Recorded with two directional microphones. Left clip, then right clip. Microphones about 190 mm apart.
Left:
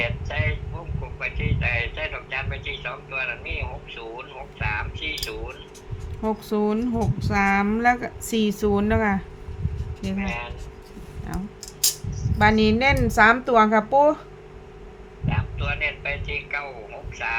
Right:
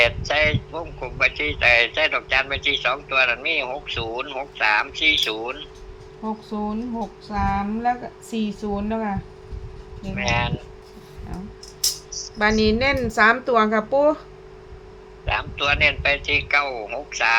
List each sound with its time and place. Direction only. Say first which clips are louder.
0.0 s a sound: right 9 dB; 60° right (ahead or behind)
0.7 s a man's voice: right 10 dB; 60° right (ahead or behind)
6.2 s a woman's voice: left 5 dB; 45° left (ahead or behind)
10.2 s a man's voice: right 9 dB; 60° right (ahead or behind)
12.4 s a woman's voice: even; 5° left (ahead or behind)
15.3 s a man's voice: right 8 dB; 60° right (ahead or behind)